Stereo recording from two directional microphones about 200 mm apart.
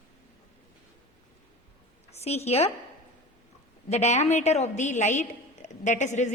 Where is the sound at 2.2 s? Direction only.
30° left (ahead or behind).